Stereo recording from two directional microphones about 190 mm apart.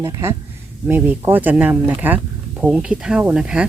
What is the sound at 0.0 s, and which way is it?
Speech, 15° right (ahead or behind).